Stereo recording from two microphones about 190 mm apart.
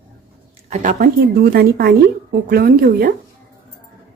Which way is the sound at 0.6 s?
40° right (ahead or behind).